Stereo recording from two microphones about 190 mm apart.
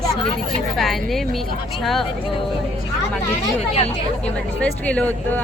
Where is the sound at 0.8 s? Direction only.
Centre (ahead or behind).